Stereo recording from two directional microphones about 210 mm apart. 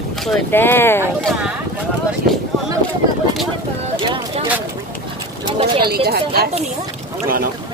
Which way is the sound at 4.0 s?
25° right (ahead or behind).